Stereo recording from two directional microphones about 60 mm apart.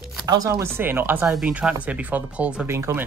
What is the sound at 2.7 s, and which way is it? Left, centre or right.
Speech, right.